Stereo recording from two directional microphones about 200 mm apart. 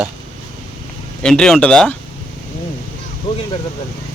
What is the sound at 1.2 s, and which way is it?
Speech, 5° left (ahead or behind).